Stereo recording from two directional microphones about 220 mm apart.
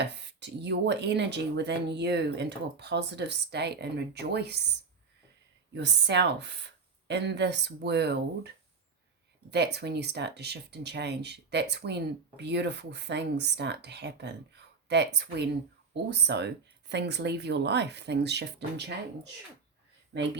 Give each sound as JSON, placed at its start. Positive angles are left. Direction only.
{"t": 0.0, "sound": "speech", "side_deg": -50}
{"t": 5.7, "sound": "speech", "side_deg": -50}